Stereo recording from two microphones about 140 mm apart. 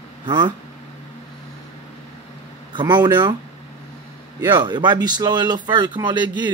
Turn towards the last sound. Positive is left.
turn(degrees=-35)  # may be behind; listen again after turning